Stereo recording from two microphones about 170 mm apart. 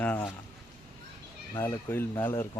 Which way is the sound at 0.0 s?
10° left (ahead or behind).